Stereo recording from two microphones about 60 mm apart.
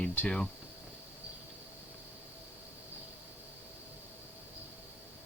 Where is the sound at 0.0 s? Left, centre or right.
Left.